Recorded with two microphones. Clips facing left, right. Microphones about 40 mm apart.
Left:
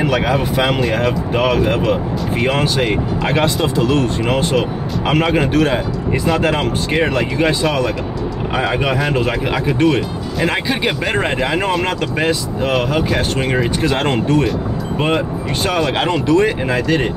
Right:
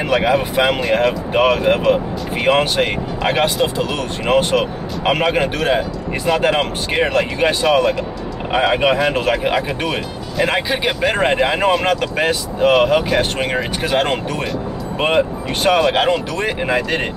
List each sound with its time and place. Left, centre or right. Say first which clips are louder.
0.0 s speech: right 1 dB; centre
3.5 s speech: left 3 dB; centre
7.2 s speech: even; right
8.5 s speech: right 3 dB; centre
12.7 s speech: right 3 dB; centre
13.1 s speech: even; centre
15.8 s speech: right 2 dB; centre